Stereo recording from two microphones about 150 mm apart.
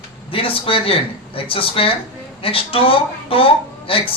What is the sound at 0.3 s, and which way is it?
Speech, 35° left (ahead or behind).